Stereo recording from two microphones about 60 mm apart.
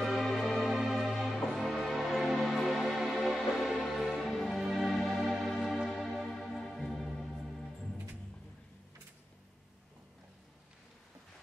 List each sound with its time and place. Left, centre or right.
0.0 s music: centre